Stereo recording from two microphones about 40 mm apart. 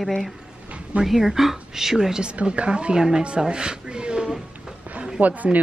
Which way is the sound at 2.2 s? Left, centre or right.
Right.